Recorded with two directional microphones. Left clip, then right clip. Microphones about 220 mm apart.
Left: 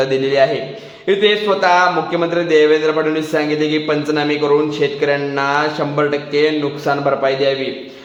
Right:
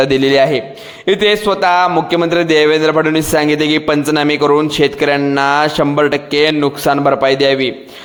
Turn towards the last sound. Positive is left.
turn(degrees=-50)  # may be behind; listen again after turning